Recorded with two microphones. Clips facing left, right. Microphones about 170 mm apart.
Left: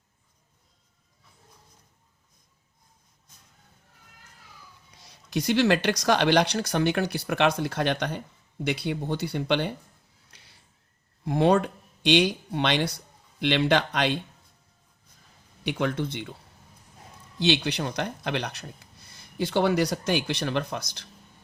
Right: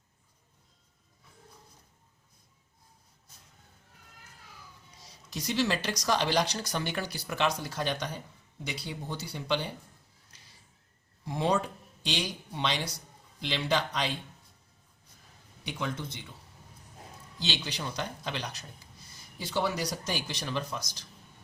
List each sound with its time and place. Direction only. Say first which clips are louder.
5.0 s speech: left 9 dB; 60° left (ahead or behind)
10.3 s a sound: left 3 dB; 60° left (ahead or behind)
11.3 s speech: left 7 dB; 60° left (ahead or behind)
15.6 s speech: left 8 dB; 65° left (ahead or behind)
17.4 s speech: left 11 dB; 60° left (ahead or behind)